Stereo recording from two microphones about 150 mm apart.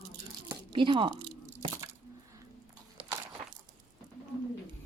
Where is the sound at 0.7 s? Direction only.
35° right (ahead or behind).